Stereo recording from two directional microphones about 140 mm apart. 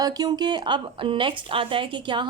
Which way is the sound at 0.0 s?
25° right (ahead or behind).